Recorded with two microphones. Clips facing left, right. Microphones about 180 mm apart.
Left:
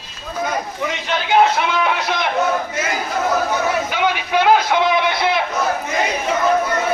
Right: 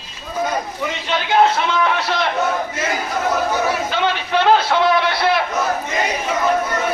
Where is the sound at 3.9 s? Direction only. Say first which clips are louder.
Even; 10° left (ahead or behind).